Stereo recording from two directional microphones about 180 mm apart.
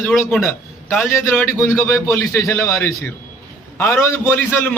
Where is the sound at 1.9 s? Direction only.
5° left (ahead or behind).